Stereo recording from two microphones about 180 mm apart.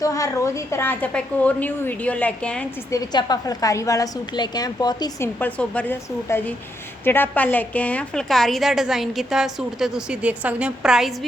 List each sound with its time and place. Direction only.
0.0 s a woman's voice: 20° left (ahead or behind)
2.9 s a woman's voice: 20° left (ahead or behind)
5.4 s a woman's voice: 10° left (ahead or behind)